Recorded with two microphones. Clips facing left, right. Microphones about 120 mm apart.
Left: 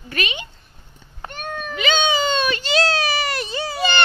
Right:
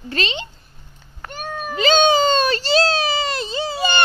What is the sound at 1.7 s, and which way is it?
Speech, 40° right (ahead or behind).